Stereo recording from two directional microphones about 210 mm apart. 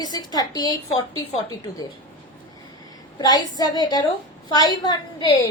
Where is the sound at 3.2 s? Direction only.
20° left (ahead or behind).